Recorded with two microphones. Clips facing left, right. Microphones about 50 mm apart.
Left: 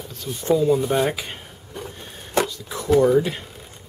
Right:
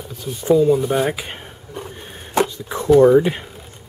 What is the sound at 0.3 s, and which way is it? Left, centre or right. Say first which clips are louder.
Speech: right 4 dB; centre.